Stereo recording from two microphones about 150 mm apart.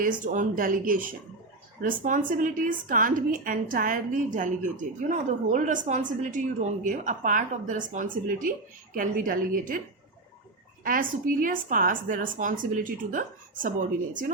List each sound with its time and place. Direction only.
0.0 s a woman's voice: 60° right (ahead or behind)
10.8 s a woman's voice: 65° right (ahead or behind)